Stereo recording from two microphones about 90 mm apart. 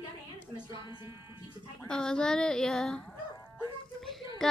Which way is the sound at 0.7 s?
55° left (ahead or behind).